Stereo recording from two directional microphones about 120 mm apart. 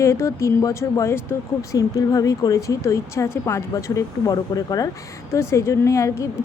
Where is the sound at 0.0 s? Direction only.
25° left (ahead or behind).